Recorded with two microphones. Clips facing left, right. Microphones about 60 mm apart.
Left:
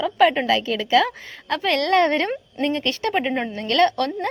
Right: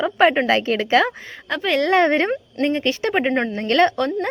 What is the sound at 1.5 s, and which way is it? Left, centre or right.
Speech, centre.